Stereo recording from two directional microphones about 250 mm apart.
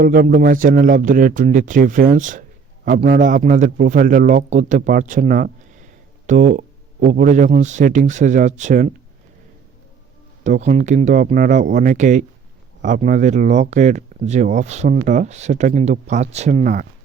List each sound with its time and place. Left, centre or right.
0.0 s a man's voice: right
10.4 s speech: right